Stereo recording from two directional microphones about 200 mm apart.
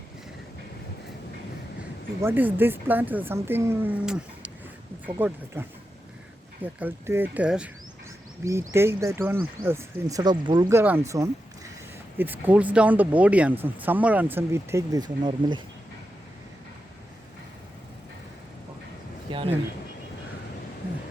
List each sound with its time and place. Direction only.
2.2 s speech: 10° right (ahead or behind)
19.3 s speech: 25° right (ahead or behind)